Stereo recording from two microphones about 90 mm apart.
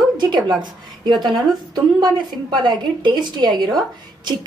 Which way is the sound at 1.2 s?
55° right (ahead or behind).